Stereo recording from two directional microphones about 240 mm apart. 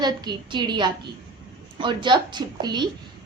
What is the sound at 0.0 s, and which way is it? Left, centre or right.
A woman's voice, centre.